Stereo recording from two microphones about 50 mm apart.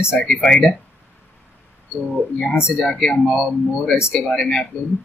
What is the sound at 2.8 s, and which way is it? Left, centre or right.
Speech, centre.